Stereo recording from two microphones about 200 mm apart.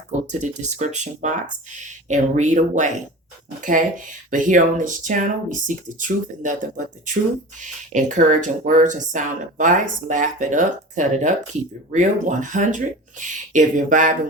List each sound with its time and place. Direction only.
0.1 s speech: 35° right (ahead or behind)